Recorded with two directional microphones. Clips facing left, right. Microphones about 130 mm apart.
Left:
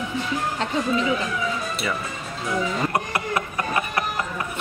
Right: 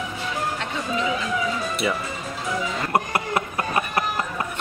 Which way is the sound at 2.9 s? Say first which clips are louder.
Right 2 dB; 25° right (ahead or behind).